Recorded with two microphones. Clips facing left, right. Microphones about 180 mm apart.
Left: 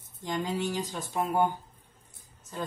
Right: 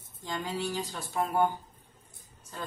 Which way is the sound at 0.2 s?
15° left (ahead or behind).